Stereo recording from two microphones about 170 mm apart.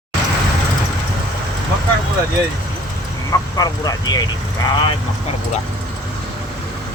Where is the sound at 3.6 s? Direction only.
20° left (ahead or behind).